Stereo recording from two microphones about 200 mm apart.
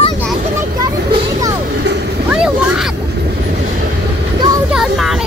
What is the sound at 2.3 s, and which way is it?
Vehicle, 5° right (ahead or behind).